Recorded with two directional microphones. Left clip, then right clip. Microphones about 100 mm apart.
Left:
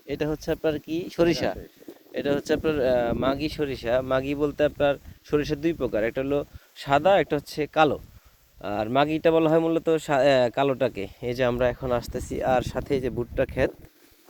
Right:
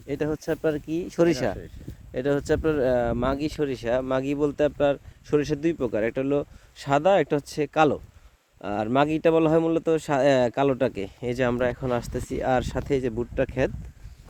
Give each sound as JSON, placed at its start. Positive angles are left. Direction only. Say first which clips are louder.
{"t": 0.1, "sound": "speech", "louder": "even", "side_deg": -10}
{"t": 10.2, "sound": "speech", "louder": "right 1 dB", "side_deg": -45}
{"t": 13.0, "sound": "speech", "louder": "even", "side_deg": -10}